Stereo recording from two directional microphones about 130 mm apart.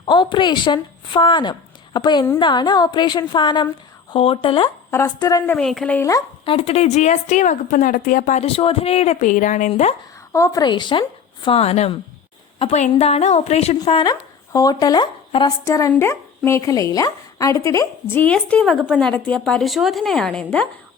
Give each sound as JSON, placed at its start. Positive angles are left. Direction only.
{"t": 0.0, "sound": "a woman's voice", "side_deg": 40}
{"t": 4.9, "sound": "speech", "side_deg": 20}
{"t": 5.5, "sound": "speech", "side_deg": 5}
{"t": 6.0, "sound": "speech", "side_deg": 25}
{"t": 6.4, "sound": "a woman's voice", "side_deg": 45}
{"t": 8.4, "sound": "speech", "side_deg": 45}
{"t": 10.3, "sound": "a woman's voice", "side_deg": 25}
{"t": 11.4, "sound": "a woman's voice", "side_deg": 50}
{"t": 14.0, "sound": "speech", "side_deg": 30}
{"t": 15.6, "sound": "speech", "side_deg": 25}
{"t": 18.2, "sound": "speech", "side_deg": 10}